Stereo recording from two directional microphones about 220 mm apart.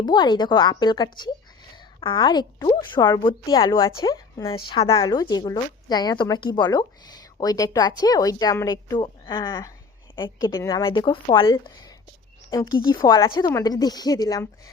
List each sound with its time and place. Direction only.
0.0 s a woman's voice: 20° left (ahead or behind)